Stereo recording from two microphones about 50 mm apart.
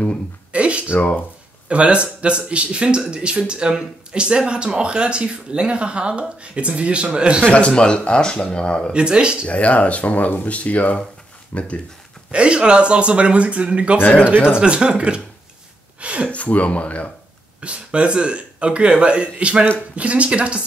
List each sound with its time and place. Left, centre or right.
0.5 s a sound: right
0.9 s speech: left
1.7 s speech: right
7.4 s speech: left
8.9 s speech: centre
9.5 s speech: left
12.3 s speech: right
16.3 s speech: left
17.6 s speech: right